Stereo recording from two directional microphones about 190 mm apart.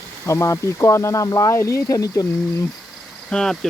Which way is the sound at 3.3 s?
5° left (ahead or behind).